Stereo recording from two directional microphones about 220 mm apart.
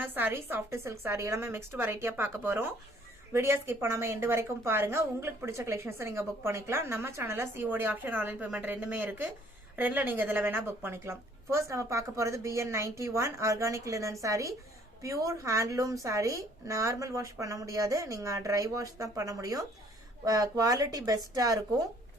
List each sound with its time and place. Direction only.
0.0 s a woman's voice: 10° right (ahead or behind)